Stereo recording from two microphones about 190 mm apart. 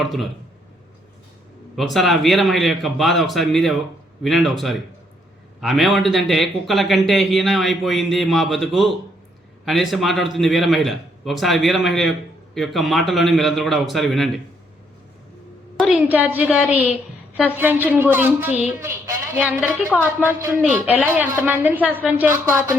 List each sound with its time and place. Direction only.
0.0 s a man's voice: centre (ahead or behind)
1.7 s a man's voice: centre (ahead or behind)
15.8 s speech: 5° right (ahead or behind)